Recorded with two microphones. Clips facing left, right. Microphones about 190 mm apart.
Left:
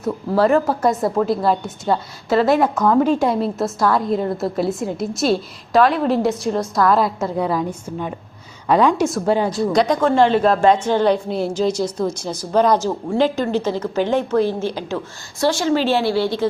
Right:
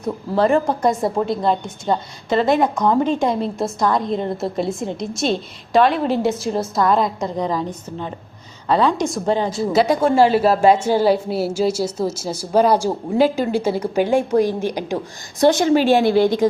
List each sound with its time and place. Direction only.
0.4 s a woman's voice: 5° left (ahead or behind)
9.6 s a woman's voice: 5° right (ahead or behind)